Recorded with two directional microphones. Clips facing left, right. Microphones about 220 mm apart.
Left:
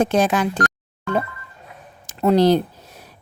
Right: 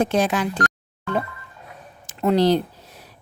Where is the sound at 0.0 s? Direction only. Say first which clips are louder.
Left 2 dB; 45° left (ahead or behind).